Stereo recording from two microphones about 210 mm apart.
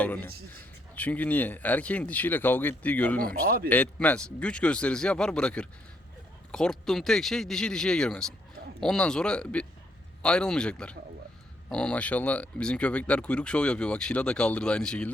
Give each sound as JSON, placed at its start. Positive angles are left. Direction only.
{"t": 0.0, "sound": "speech", "side_deg": 10}
{"t": 3.2, "sound": "speech", "side_deg": -45}
{"t": 3.7, "sound": "speech", "side_deg": 10}